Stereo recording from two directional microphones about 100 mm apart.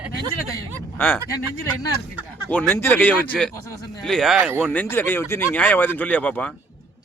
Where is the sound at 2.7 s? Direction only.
20° left (ahead or behind); by 4.4 s 5° left (ahead or behind).